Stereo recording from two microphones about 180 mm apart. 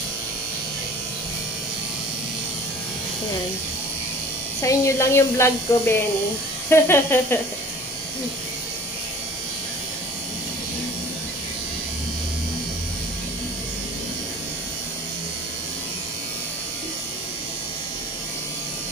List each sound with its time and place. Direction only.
4.6 s speech: 15° left (ahead or behind)